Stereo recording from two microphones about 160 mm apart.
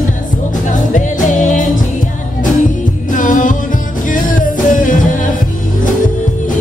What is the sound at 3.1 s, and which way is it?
Music, 55° left (ahead or behind).